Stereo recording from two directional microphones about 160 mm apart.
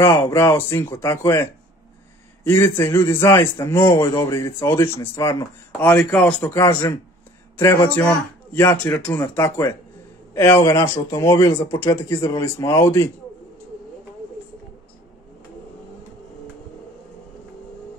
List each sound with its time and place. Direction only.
0.0 s a man's voice: 15° left (ahead or behind)